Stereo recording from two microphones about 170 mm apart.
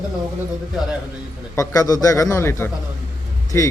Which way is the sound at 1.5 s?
20° left (ahead or behind).